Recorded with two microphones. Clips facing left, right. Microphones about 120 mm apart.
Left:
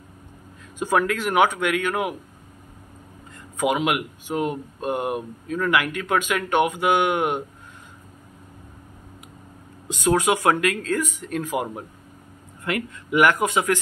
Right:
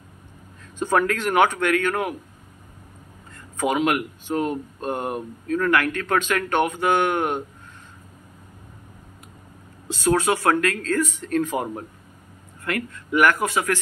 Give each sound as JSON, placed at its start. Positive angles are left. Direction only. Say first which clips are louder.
{"t": 0.7, "sound": "speech", "louder": "right 1 dB", "side_deg": 10}
{"t": 3.5, "sound": "speech", "louder": "right 1 dB", "side_deg": 10}
{"t": 9.8, "sound": "speech", "louder": "even", "side_deg": 15}
{"t": 12.6, "sound": "speech", "louder": "left 1 dB", "side_deg": 15}